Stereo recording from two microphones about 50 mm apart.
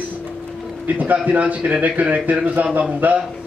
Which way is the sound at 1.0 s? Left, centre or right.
Right.